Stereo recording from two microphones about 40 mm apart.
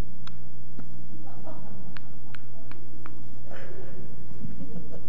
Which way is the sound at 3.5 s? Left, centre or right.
Left.